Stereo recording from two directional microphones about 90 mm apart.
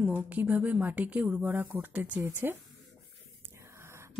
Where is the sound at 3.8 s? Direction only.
30° right (ahead or behind).